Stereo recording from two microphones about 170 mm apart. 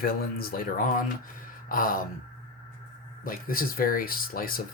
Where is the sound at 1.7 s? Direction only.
55° left (ahead or behind).